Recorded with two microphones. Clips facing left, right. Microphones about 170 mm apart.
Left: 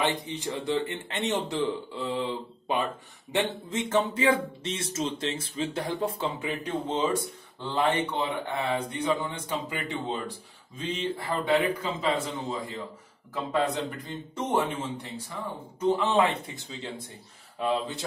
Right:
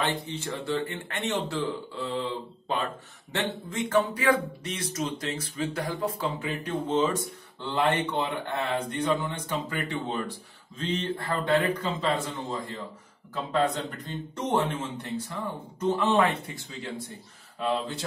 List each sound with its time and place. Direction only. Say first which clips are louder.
0.0 s speech: left 1 dB; 15° left (ahead or behind)
3.3 s speech: left 2 dB; 20° left (ahead or behind)
6.4 s speech: even; 15° left (ahead or behind)